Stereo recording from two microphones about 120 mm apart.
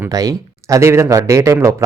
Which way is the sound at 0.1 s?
30° right (ahead or behind).